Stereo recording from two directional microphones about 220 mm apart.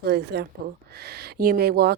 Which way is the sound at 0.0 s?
45° right (ahead or behind).